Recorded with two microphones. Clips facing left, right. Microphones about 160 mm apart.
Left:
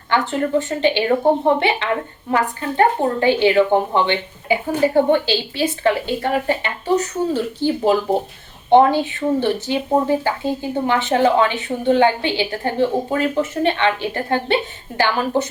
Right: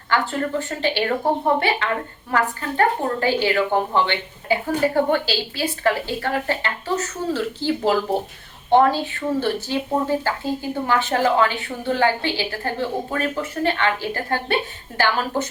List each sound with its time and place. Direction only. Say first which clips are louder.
0.1 s a woman's voice: left 4 dB; 20° left (ahead or behind)